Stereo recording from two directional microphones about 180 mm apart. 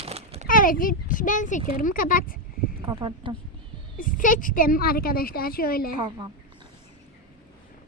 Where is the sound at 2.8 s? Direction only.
30° right (ahead or behind).